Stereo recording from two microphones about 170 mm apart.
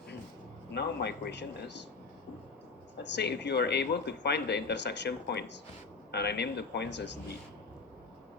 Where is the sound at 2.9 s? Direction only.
90° left.